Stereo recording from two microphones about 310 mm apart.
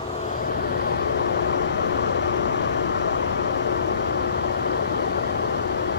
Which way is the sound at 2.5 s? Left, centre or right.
Left.